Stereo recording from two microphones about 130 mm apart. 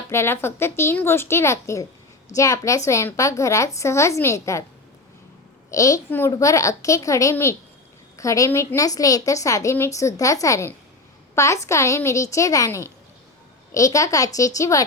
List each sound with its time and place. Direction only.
0.1 s a woman's voice: 20° left (ahead or behind)
5.7 s a woman's voice: 25° left (ahead or behind)